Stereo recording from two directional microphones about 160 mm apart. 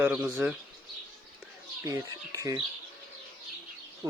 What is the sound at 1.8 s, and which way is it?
Speech, 20° right (ahead or behind).